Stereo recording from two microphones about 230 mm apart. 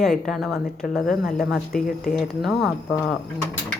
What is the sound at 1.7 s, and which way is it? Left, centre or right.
Speech, left.